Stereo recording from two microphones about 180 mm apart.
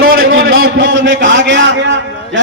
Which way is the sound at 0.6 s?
90° right.